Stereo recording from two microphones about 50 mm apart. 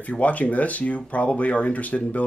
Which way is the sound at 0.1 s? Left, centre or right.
Left.